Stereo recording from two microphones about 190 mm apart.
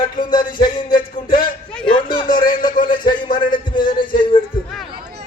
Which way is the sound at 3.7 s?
45° left (ahead or behind).